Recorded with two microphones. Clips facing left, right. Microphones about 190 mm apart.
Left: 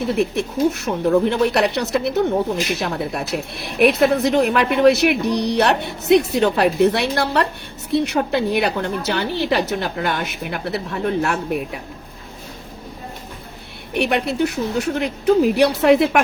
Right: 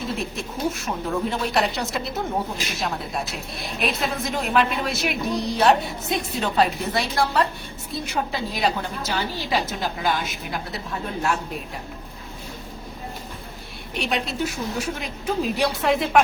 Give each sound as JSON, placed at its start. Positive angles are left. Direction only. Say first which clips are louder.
{"t": 0.0, "sound": "a woman's voice", "louder": "left 9 dB", "side_deg": 65}
{"t": 13.9, "sound": "a woman's voice", "louder": "left 7 dB", "side_deg": 60}